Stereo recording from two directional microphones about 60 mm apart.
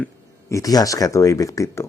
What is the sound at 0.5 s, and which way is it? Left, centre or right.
Speech, left.